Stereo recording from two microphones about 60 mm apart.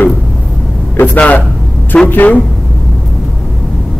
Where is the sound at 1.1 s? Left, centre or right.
Left.